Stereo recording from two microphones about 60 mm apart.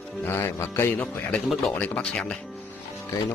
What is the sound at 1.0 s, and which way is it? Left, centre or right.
A man's voice, centre.